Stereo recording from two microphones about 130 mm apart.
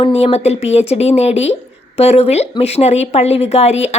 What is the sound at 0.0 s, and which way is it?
A woman's voice, 50° left (ahead or behind).